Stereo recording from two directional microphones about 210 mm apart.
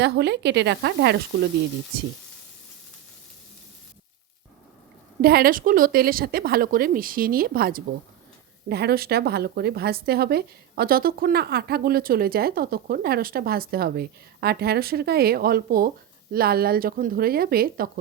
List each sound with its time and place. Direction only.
0.0 s speech: 55° right (ahead or behind)
5.2 s speech: 45° right (ahead or behind)